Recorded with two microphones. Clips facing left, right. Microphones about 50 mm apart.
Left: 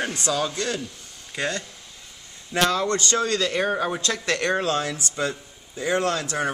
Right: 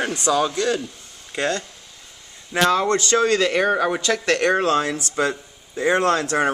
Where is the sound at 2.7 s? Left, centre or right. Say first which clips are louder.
Right 5 dB; right.